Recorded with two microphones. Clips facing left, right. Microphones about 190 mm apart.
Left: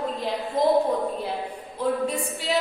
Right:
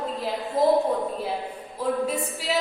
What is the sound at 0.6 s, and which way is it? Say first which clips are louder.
Speech: right 1 dB; 5° right (ahead or behind).